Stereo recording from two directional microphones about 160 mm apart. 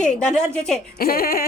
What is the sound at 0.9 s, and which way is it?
Speech, 65° left (ahead or behind).